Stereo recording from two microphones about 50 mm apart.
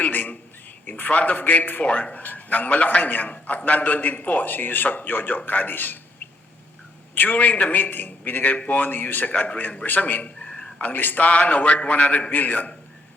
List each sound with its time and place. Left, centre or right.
0.0 s a sound: left
0.9 s a man's voice: left
7.2 s a man's voice: left
9.3 s a man's voice: left
9.8 s a man's voice: left
12.3 s a man's voice: left